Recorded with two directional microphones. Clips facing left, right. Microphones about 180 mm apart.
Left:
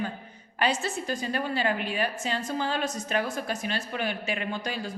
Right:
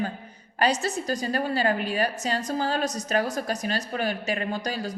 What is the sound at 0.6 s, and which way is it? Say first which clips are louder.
A woman's voice: right 3 dB; 40° right (ahead or behind).